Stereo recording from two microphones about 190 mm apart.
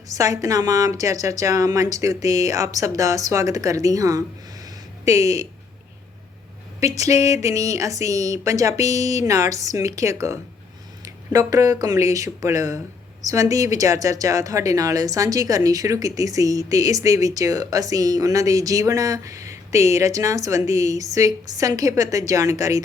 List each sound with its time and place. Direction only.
0.1 s speech: 20° right (ahead or behind)
4.6 s a sound: 15° right (ahead or behind)
6.7 s speech: 15° right (ahead or behind)